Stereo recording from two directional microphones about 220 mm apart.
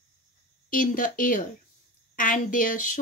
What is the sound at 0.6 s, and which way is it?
Speech, 40° left (ahead or behind).